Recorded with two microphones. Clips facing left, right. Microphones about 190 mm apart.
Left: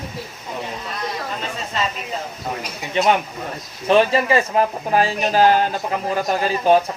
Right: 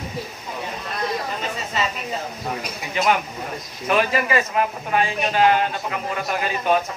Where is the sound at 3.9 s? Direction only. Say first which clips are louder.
Left 5 dB; 30° left (ahead or behind).